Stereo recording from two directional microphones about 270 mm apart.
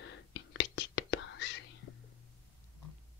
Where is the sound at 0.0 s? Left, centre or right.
Left.